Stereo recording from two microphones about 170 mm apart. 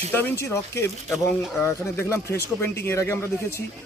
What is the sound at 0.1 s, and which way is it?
Speech, 15° left (ahead or behind).